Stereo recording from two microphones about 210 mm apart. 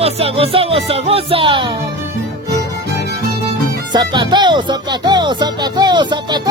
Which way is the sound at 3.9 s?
20° right (ahead or behind).